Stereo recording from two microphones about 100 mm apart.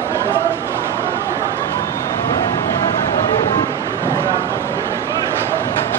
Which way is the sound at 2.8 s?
60° left (ahead or behind).